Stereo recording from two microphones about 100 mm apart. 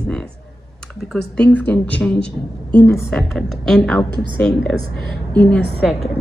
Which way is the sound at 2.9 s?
5° left (ahead or behind).